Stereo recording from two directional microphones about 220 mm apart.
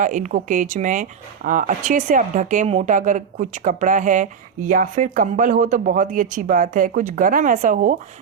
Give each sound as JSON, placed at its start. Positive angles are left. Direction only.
{"t": 0.0, "sound": "speech", "side_deg": -35}